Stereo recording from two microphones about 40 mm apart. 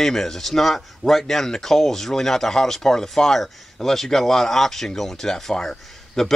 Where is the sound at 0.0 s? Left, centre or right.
Centre.